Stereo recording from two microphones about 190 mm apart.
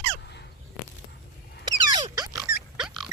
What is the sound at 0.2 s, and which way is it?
Fowl, 60° left (ahead or behind).